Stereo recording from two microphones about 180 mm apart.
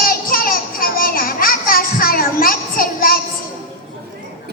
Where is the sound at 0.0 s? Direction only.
55° left (ahead or behind).